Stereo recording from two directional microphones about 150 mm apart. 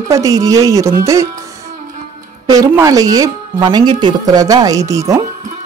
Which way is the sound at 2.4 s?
25° right (ahead or behind).